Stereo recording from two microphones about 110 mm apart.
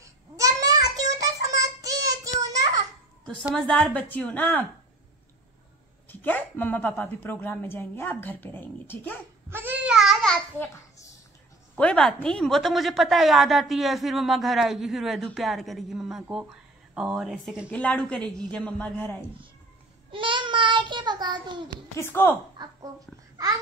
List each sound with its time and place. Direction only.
0.0 s child singing: 30° right (ahead or behind)
3.5 s a man's voice: 5° left (ahead or behind)
6.0 s a woman's voice: 20° left (ahead or behind)
9.5 s babbling: 20° right (ahead or behind)
9.8 s babbling: 5° right (ahead or behind)
11.7 s a man's voice: 10° left (ahead or behind); by 17.6 s 5° right (ahead or behind)
17.6 s a man's voice: 10° left (ahead or behind)
20.1 s child singing: 50° right (ahead or behind)
22.0 s a woman's voice: 20° left (ahead or behind)